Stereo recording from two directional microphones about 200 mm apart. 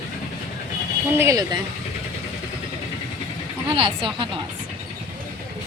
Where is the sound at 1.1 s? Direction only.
15° right (ahead or behind).